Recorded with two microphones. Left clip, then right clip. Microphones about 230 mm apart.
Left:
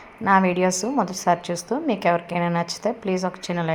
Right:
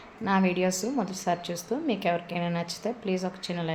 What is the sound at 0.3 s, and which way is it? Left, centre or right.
A woman's voice, centre.